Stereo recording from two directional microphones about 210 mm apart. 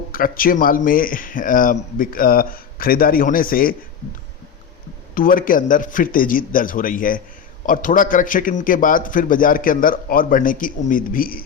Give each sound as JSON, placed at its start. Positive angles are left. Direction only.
{"t": 0.1, "sound": "speech", "side_deg": 40}
{"t": 5.1, "sound": "a man's voice", "side_deg": 40}